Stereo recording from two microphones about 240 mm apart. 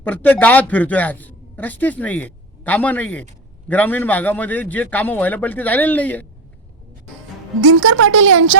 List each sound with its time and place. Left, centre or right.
0.0 s speech: centre
7.6 s a woman's voice: right